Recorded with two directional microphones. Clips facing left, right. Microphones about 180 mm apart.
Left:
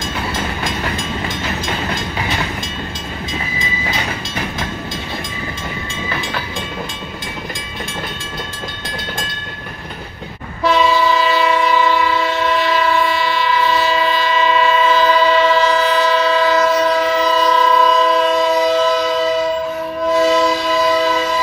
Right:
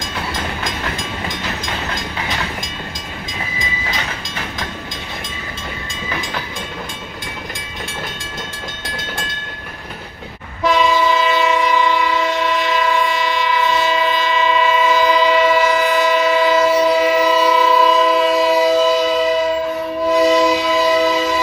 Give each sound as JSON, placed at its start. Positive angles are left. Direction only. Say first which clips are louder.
{"t": 10.6, "sound": "train", "louder": "left 1 dB", "side_deg": -15}
{"t": 20.2, "sound": "train", "louder": "right 1 dB", "side_deg": -15}